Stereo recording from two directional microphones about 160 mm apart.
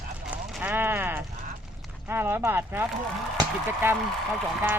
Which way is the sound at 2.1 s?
15° right (ahead or behind).